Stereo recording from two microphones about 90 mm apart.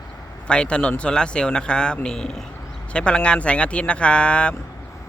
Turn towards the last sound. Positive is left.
turn(degrees=10)  # may be behind; listen again after turning